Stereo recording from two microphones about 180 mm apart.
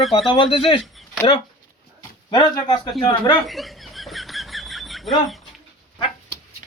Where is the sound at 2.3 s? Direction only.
25° left (ahead or behind).